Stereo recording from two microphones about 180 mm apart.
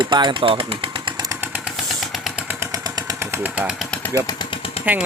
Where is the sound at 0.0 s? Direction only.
25° right (ahead or behind).